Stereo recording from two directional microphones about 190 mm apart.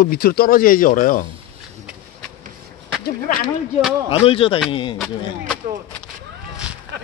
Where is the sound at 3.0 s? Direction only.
45° left (ahead or behind).